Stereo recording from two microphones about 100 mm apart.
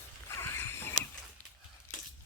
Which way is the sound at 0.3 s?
25° left (ahead or behind).